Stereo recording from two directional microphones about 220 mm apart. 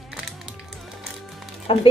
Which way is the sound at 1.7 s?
25° left (ahead or behind).